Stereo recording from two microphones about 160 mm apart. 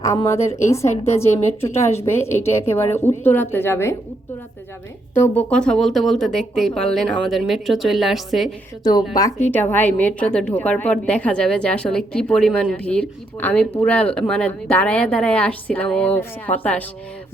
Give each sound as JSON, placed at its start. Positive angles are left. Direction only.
{"t": 0.0, "sound": "a woman's voice", "side_deg": 20}
{"t": 5.1, "sound": "speech", "side_deg": 10}
{"t": 8.8, "sound": "a woman's voice", "side_deg": 25}
{"t": 9.5, "sound": "a woman's voice", "side_deg": 10}